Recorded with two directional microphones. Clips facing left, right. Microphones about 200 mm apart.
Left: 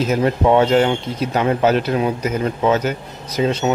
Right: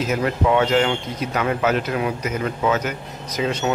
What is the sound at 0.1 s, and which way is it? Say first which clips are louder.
Speech: left 4 dB; 30° left (ahead or behind).